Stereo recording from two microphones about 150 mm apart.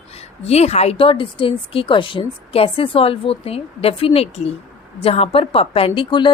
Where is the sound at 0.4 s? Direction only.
45° left (ahead or behind).